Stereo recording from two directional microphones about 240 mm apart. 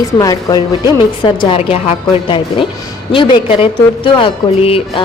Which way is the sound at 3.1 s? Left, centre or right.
Left.